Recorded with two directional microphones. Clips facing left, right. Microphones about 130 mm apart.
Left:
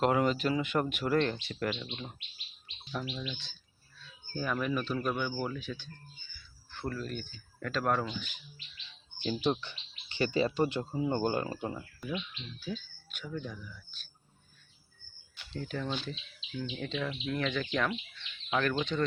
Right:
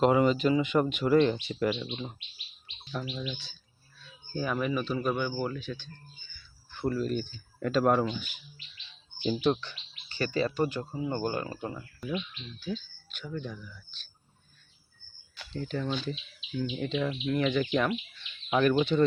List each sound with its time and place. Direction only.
0.0 s speech: centre (ahead or behind)
3.2 s speech: 5° right (ahead or behind)
6.7 s speech: 10° right (ahead or behind)
9.4 s speech: 15° left (ahead or behind)
12.5 s speech: 5° left (ahead or behind)
15.5 s speech: centre (ahead or behind)